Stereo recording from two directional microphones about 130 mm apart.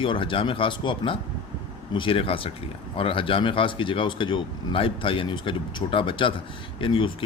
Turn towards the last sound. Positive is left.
turn(degrees=45)  # may be behind; listen again after turning